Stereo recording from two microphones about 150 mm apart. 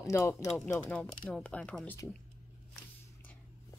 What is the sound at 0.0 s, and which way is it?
Speech, 20° left (ahead or behind).